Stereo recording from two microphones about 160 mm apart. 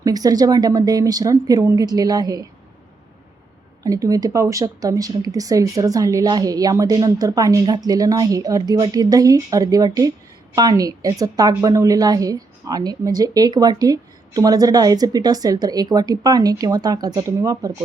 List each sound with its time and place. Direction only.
0.0 s a woman's voice: 25° right (ahead or behind)
3.8 s a woman's voice: 20° right (ahead or behind)